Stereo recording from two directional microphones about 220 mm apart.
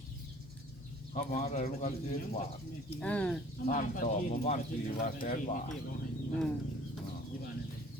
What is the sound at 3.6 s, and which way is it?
Speech, 40° left (ahead or behind).